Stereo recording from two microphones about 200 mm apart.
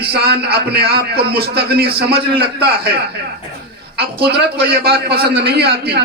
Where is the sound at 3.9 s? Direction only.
55° right (ahead or behind).